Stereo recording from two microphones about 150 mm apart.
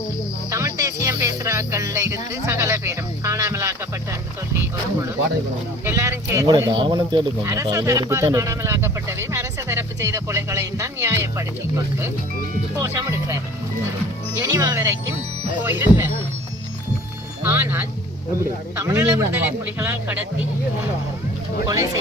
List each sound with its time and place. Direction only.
0.5 s music: 20° right (ahead or behind)
1.0 s speech: 20° right (ahead or behind)
5.8 s speech: 15° right (ahead or behind); by 7.2 s 30° right (ahead or behind)
7.4 s speech: 20° right (ahead or behind)
12.7 s speech: 20° right (ahead or behind)
14.5 s speech: 20° right (ahead or behind)
17.4 s speech: 15° right (ahead or behind)